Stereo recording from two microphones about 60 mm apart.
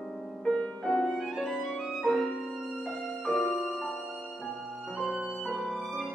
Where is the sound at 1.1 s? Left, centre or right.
Centre.